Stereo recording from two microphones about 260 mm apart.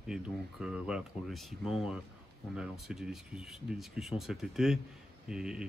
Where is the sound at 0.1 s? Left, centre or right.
Centre.